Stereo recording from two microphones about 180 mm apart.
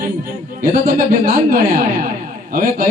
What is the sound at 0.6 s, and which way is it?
A man's voice, 50° right (ahead or behind).